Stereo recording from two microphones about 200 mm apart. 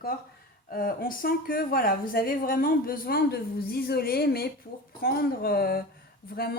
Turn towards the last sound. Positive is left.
turn(degrees=50)  # may be behind; listen again after turning